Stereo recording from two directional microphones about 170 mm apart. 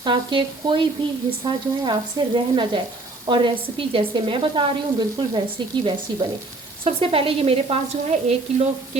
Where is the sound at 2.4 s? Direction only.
30° right (ahead or behind).